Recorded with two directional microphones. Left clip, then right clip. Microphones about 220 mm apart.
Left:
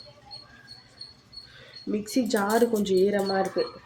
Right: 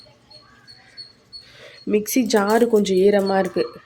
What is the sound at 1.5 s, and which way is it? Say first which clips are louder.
Speech: right 11 dB; 40° right (ahead or behind).